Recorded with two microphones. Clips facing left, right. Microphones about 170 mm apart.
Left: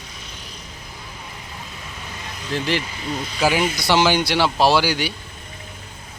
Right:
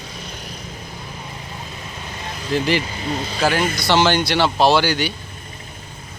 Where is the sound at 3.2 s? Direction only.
30° right (ahead or behind).